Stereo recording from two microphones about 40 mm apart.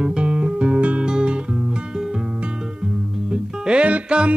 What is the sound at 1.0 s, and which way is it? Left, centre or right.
Music, right.